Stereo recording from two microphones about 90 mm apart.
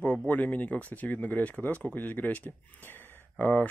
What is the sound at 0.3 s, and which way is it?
Speech, 20° left (ahead or behind).